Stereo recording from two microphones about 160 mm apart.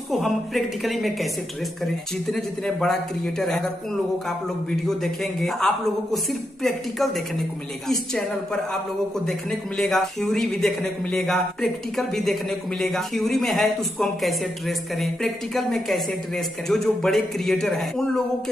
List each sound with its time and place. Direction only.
0.1 s a man's voice: centre (ahead or behind)
2.3 s a man's voice: 5° left (ahead or behind)
4.6 s a man's voice: centre (ahead or behind)
9.2 s a man's voice: 5° left (ahead or behind)